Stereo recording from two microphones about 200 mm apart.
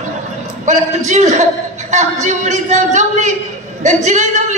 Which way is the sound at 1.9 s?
35° right (ahead or behind).